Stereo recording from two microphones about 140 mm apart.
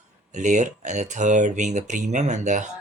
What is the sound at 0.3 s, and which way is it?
Speech, 60° right (ahead or behind).